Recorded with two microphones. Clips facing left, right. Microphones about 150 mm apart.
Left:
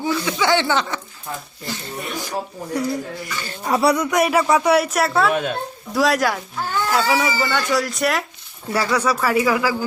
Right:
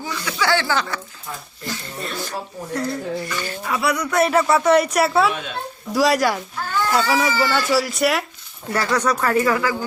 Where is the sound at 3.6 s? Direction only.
35° left (ahead or behind).